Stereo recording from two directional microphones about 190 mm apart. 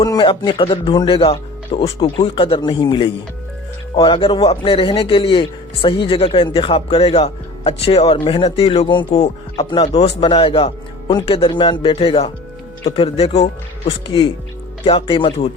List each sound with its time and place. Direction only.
0.0 s speech: 20° left (ahead or behind)